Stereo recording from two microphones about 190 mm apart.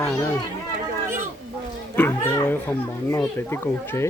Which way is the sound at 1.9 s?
10° left (ahead or behind).